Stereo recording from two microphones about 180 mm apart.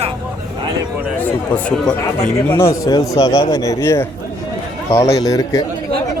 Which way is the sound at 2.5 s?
15° left (ahead or behind).